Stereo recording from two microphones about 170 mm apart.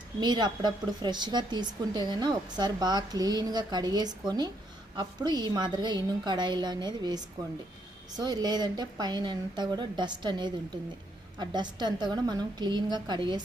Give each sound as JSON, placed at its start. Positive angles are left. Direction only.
{"t": 0.2, "sound": "speech", "side_deg": -25}